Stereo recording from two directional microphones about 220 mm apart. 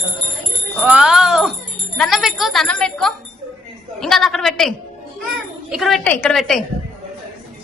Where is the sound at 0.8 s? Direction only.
5° right (ahead or behind).